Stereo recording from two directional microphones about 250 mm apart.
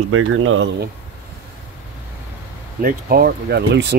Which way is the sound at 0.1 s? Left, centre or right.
Right.